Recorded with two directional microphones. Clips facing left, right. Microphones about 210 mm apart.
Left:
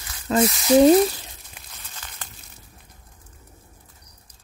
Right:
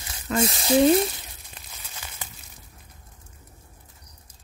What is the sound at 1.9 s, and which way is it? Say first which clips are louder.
Crumpling: right 1 dB; 10° right (ahead or behind).